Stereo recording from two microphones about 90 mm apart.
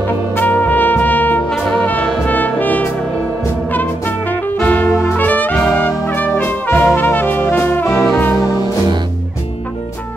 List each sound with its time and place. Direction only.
0.4 s brass instrument: 20° left (ahead or behind)
4.6 s music: 20° left (ahead or behind)
5.1 s trumpet: 20° left (ahead or behind)
5.7 s brass instrument: 25° left (ahead or behind)
7.4 s music: 25° left (ahead or behind)